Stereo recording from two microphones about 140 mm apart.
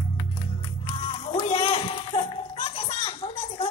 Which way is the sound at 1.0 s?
45° left (ahead or behind).